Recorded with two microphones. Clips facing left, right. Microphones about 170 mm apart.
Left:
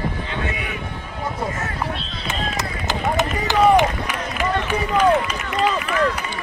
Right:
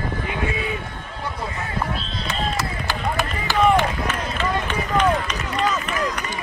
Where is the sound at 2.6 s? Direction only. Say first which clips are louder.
Left 2 dB; 20° left (ahead or behind).